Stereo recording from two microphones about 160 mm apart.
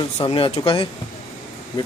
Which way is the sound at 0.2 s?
35° left (ahead or behind).